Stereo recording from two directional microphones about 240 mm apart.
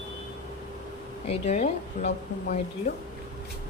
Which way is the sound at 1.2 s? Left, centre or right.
Left.